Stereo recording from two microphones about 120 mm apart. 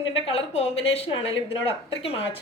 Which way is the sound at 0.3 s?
60° left (ahead or behind).